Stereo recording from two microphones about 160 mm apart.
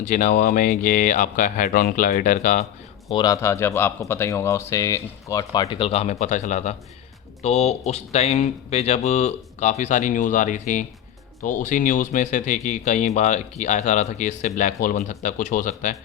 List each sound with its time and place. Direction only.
0.0 s speech: 50° left (ahead or behind)
3.2 s speech: 20° left (ahead or behind); by 16.0 s 55° left (ahead or behind)